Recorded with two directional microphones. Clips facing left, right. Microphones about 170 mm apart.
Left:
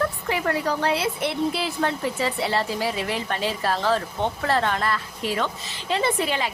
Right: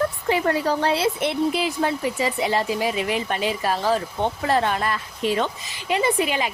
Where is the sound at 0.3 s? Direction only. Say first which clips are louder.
Right 5 dB; 25° right (ahead or behind).